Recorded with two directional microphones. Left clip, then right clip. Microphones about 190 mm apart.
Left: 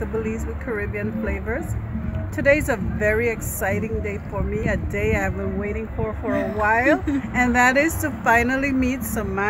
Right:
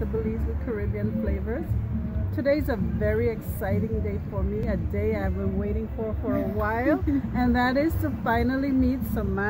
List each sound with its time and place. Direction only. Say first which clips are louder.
0.7 s speech: left 5 dB; 20° left (ahead or behind)